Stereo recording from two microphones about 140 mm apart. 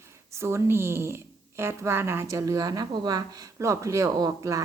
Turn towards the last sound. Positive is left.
turn(degrees=-25)  # may be behind; listen again after turning